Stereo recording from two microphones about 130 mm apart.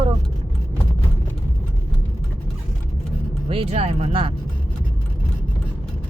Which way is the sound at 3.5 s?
50° right (ahead or behind).